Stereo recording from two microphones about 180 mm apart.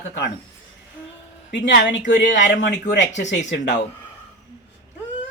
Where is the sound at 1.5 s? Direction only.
80° left.